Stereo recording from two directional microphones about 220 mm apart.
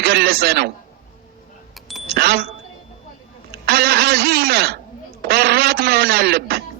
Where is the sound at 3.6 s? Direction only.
45° right (ahead or behind).